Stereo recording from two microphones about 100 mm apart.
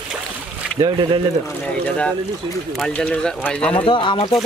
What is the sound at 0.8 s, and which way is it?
Speech, 45° right (ahead or behind).